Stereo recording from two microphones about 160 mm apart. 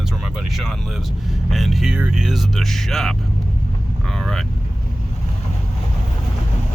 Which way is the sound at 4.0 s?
5° left (ahead or behind).